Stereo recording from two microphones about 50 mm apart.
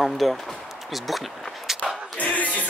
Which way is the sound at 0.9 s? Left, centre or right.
Centre.